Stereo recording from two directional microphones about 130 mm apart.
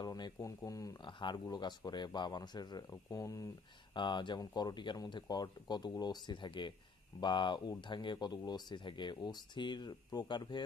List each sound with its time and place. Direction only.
0.0 s speech: 30° left (ahead or behind)
3.9 s speech: 40° left (ahead or behind)